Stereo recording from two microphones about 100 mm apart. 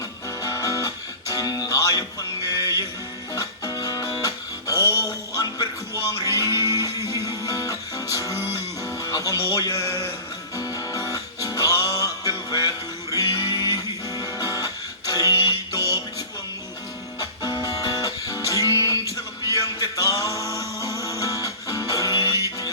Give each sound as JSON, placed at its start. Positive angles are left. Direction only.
{"t": 0.4, "sound": "music", "side_deg": 35}
{"t": 9.5, "sound": "a sound", "side_deg": 35}
{"t": 10.6, "sound": "music", "side_deg": 35}
{"t": 17.2, "sound": "music", "side_deg": 35}